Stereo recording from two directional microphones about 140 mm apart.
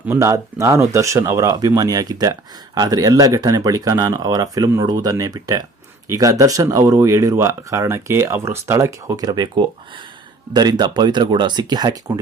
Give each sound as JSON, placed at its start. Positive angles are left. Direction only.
{"t": 0.1, "sound": "speech", "side_deg": -20}